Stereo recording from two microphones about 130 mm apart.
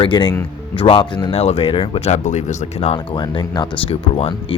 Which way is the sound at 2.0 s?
65° left (ahead or behind).